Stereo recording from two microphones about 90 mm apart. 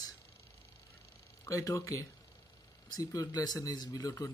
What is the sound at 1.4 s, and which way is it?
Speech, 40° left (ahead or behind).